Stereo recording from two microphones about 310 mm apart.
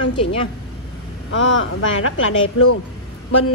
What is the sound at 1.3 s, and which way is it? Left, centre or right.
A woman's voice, left.